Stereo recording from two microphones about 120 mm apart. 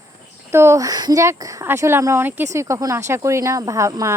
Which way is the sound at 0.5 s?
20° right (ahead or behind).